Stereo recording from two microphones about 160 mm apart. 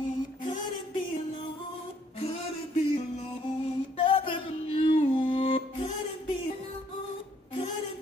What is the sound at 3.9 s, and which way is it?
Music, 35° left (ahead or behind).